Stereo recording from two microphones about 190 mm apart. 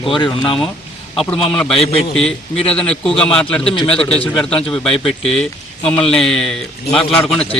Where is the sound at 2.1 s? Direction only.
5° left (ahead or behind).